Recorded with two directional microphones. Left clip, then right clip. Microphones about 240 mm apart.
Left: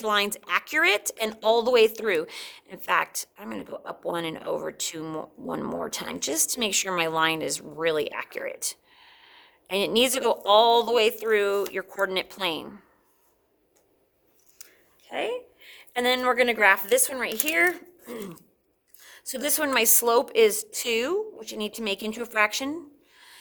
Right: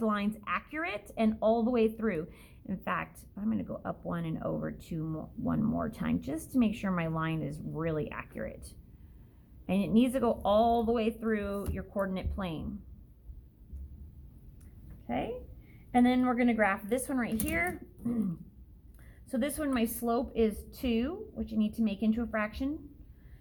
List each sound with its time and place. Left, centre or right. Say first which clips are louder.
0.0 s a woman's voice: left 8 dB; left
15.1 s a woman's voice: left 6 dB; left